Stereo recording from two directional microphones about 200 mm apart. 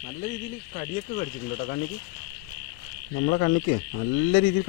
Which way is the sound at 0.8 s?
40° left (ahead or behind).